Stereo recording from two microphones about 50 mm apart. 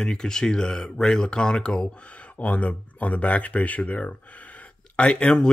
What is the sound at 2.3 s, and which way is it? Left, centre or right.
Speech, left.